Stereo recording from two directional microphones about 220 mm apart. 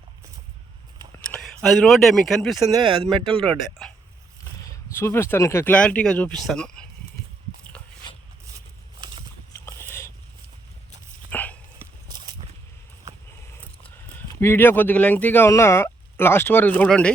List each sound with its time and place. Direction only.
1.3 s speech: centre (ahead or behind)
3.1 s speech: 25° right (ahead or behind)
3.4 s speech: 5° left (ahead or behind)
9.6 s a sound: 10° left (ahead or behind)
11.3 s dog: 5° left (ahead or behind)
11.8 s walk: 20° right (ahead or behind)
13.5 s speech: 10° left (ahead or behind)